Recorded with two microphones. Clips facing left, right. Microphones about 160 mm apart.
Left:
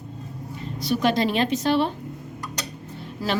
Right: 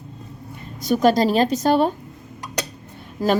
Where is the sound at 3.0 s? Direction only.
45° right (ahead or behind).